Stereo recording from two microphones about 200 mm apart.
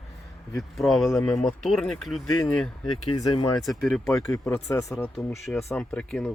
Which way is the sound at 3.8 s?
Centre (ahead or behind).